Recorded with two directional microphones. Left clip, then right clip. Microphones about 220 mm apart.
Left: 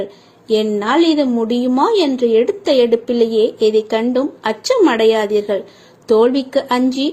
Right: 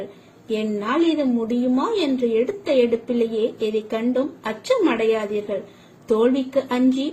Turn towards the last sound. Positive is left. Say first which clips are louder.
# left 5 dB
turn(degrees=15)  # may be behind; listen again after turning